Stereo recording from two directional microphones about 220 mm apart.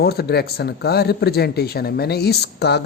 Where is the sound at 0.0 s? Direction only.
45° left (ahead or behind).